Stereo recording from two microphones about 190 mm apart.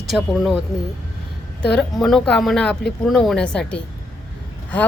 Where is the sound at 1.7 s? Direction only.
Centre (ahead or behind).